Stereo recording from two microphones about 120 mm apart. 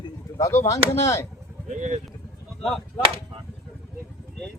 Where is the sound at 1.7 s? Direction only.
80° right.